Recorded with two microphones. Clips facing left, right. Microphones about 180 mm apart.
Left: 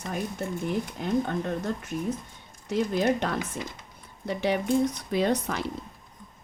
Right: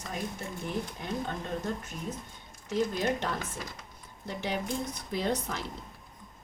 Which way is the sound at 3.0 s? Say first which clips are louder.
Left 5 dB; 65° left (ahead or behind).